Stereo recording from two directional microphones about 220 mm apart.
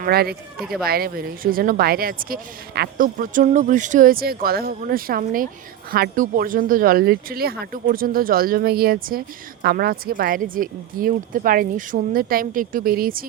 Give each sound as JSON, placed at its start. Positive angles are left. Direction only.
{"t": 0.0, "sound": "speech", "side_deg": -45}
{"t": 0.6, "sound": "speech", "side_deg": 0}
{"t": 0.9, "sound": "speech", "side_deg": -45}